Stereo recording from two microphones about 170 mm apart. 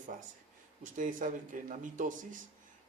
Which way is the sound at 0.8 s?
50° right (ahead or behind).